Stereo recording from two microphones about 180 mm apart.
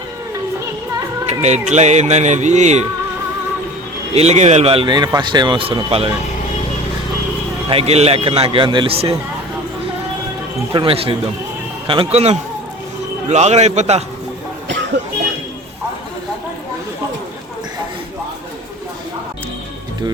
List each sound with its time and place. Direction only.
1.3 s speech: 40° right (ahead or behind)
4.1 s speech: 35° right (ahead or behind)
7.7 s speech: 35° right (ahead or behind)
10.7 s speech: 30° right (ahead or behind)